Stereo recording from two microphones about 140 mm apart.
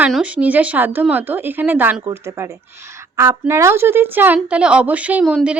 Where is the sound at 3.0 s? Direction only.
20° right (ahead or behind).